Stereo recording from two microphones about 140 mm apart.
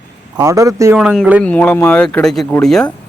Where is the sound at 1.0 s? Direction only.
5° left (ahead or behind).